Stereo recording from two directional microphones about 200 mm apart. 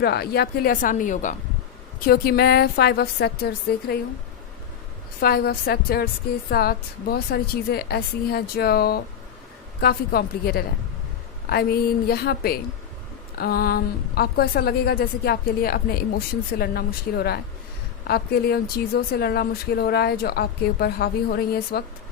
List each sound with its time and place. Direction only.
0.0 s a woman's voice: 50° left (ahead or behind)
5.2 s a woman's voice: 50° left (ahead or behind)